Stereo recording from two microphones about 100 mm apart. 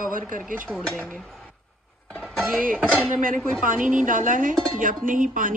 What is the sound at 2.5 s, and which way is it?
Speech, 20° right (ahead or behind).